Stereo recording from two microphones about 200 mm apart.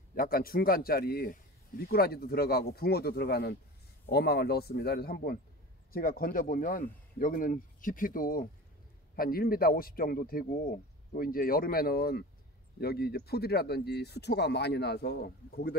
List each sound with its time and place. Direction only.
0.1 s a man's voice: 45° left (ahead or behind)